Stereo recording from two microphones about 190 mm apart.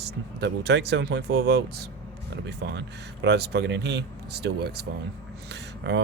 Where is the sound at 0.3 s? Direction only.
65° right (ahead or behind).